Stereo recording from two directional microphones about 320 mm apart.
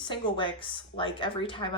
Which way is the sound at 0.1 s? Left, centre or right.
Centre.